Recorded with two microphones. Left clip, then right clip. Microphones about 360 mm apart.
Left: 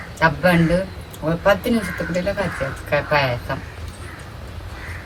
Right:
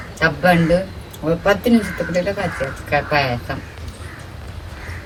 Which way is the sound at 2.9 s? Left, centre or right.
Centre.